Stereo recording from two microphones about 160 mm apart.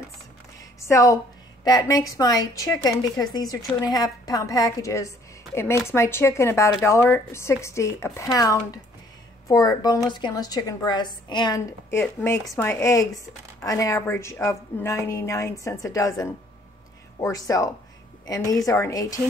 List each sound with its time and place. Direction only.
0.7 s a woman's voice: 20° left (ahead or behind)
12.0 s a woman's voice: 15° left (ahead or behind)